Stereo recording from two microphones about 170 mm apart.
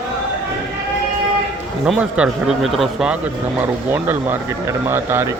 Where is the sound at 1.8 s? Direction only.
5° right (ahead or behind).